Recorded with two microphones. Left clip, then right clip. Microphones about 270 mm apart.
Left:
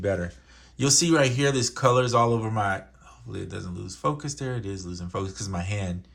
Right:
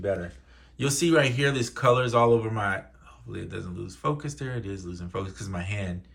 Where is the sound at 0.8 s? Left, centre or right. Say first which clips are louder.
Left 1 dB; left.